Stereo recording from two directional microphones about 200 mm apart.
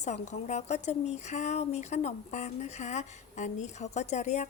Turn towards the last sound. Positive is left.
turn(degrees=35)  # may be behind; listen again after turning